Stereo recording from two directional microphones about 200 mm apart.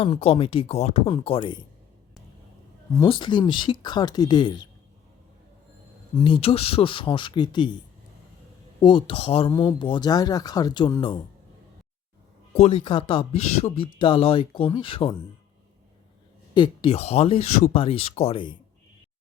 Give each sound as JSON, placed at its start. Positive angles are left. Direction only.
{"t": 0.0, "sound": "speech", "side_deg": 30}
{"t": 3.0, "sound": "speech", "side_deg": 25}
{"t": 6.2, "sound": "speech", "side_deg": 25}
{"t": 8.8, "sound": "speech", "side_deg": 25}
{"t": 12.5, "sound": "speech", "side_deg": 30}
{"t": 16.6, "sound": "speech", "side_deg": 25}